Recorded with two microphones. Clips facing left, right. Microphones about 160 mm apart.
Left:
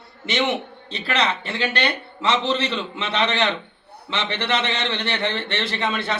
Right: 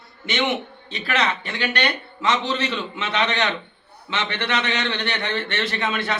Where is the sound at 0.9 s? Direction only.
30° left (ahead or behind).